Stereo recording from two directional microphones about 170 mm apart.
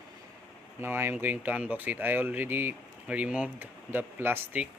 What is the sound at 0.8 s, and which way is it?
Speech, 15° right (ahead or behind).